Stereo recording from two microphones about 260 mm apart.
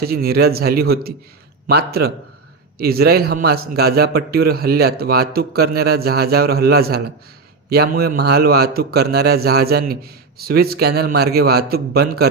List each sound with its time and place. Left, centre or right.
0.0 s a man's voice: right